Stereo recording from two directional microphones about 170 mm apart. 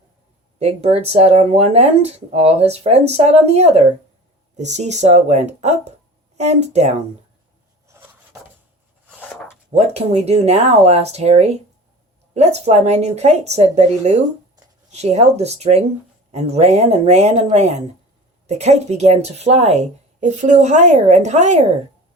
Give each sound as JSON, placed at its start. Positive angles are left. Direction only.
{"t": 0.6, "sound": "speech", "side_deg": -40}
{"t": 9.7, "sound": "speech", "side_deg": -40}